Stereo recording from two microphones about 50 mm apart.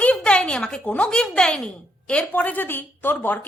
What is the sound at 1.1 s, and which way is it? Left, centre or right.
A woman's voice, centre.